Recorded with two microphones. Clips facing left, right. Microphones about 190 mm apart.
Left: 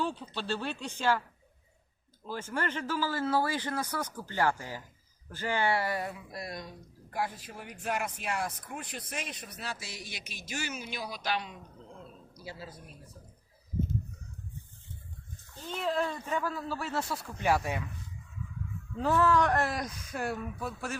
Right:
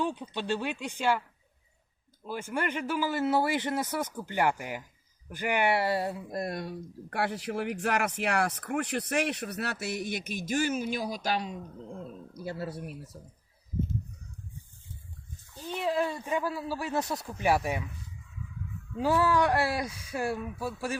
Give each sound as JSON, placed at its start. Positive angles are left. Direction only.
{"t": 0.0, "sound": "speech", "side_deg": -15}
{"t": 2.2, "sound": "speech", "side_deg": -15}
{"t": 6.3, "sound": "speech", "side_deg": -55}
{"t": 15.8, "sound": "speech", "side_deg": -10}
{"t": 18.9, "sound": "speech", "side_deg": -10}